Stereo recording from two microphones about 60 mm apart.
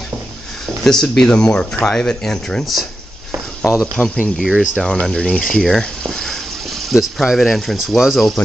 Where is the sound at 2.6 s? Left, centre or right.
Centre.